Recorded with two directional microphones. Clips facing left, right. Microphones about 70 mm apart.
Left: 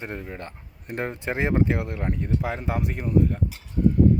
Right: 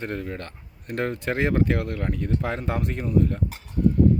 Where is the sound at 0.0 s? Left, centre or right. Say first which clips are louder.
Right 3 dB; centre.